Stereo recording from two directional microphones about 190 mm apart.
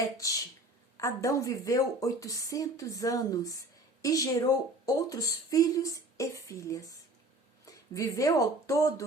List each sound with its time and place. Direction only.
0.9 s a woman's voice: 15° left (ahead or behind)